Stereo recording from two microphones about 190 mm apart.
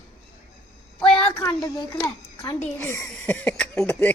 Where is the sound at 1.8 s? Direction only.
15° left (ahead or behind).